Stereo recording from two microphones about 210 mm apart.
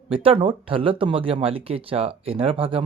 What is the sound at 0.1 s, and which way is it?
Speech, 25° right (ahead or behind).